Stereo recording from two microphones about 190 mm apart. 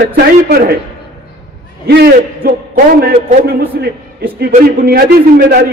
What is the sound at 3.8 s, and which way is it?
A man's voice, 55° right (ahead or behind).